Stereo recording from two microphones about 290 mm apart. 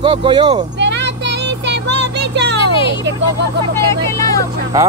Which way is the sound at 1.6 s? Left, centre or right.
Right.